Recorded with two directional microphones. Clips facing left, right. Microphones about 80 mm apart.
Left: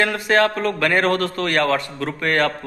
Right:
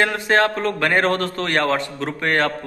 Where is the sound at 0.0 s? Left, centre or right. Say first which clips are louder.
Even; right.